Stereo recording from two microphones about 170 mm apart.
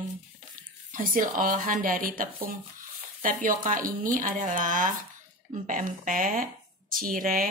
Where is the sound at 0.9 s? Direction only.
50° right (ahead or behind).